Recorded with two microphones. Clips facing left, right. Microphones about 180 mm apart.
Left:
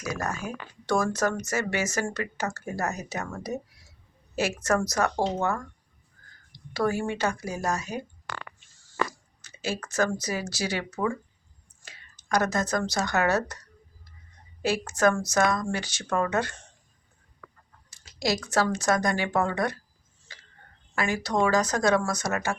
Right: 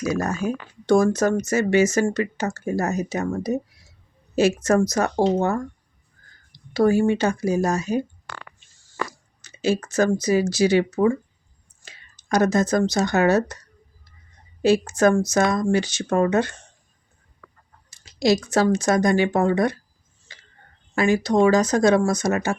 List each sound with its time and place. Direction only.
0.0 s speech: 25° right (ahead or behind)
9.4 s speech: 20° right (ahead or behind)
14.6 s speech: 20° right (ahead or behind)
17.9 s a sound: 20° right (ahead or behind)
18.5 s speech: 20° right (ahead or behind)
20.3 s a sound: 20° right (ahead or behind)
20.9 s speech: 25° right (ahead or behind)